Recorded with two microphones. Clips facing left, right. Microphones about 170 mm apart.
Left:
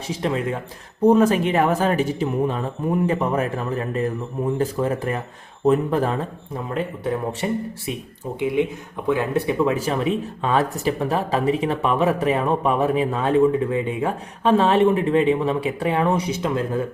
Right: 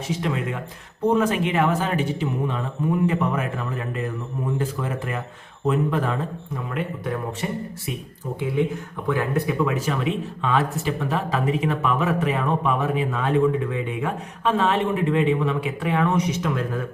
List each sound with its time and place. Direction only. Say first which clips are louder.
0.1 s speech: left 3 dB; 30° left (ahead or behind)
8.6 s speech: left 1 dB; 20° left (ahead or behind)